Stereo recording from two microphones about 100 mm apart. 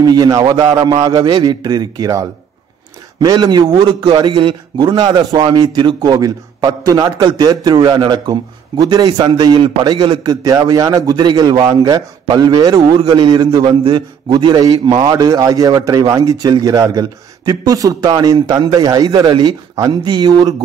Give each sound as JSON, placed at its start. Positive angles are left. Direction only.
{"t": 0.0, "sound": "a man's voice", "side_deg": -40}
{"t": 4.9, "sound": "a man's voice", "side_deg": -45}
{"t": 10.2, "sound": "a man's voice", "side_deg": -40}